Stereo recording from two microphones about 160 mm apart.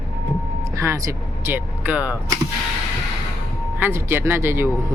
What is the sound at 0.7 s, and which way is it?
Speech, 20° right (ahead or behind).